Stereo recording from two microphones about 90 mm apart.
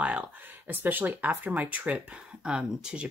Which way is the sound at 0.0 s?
15° right (ahead or behind).